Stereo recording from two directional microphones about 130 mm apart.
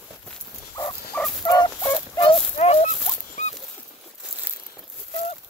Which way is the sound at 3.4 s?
70° left (ahead or behind).